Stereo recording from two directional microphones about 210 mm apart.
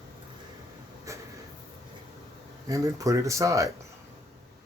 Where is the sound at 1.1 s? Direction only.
15° right (ahead or behind).